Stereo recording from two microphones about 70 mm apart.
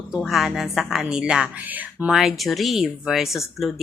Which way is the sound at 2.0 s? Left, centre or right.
Centre.